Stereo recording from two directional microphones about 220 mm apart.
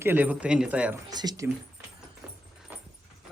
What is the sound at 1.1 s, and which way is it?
Speech, 20° right (ahead or behind).